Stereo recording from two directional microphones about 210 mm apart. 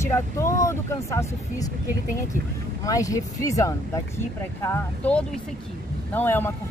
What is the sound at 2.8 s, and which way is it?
Speech, 15° left (ahead or behind).